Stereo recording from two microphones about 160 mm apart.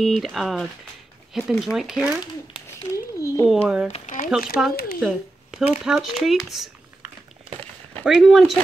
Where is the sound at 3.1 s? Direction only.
20° left (ahead or behind).